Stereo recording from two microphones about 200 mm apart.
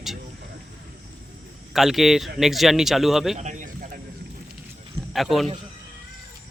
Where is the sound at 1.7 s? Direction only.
Centre (ahead or behind).